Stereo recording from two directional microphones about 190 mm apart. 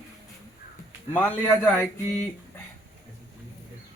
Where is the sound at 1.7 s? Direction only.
10° left (ahead or behind).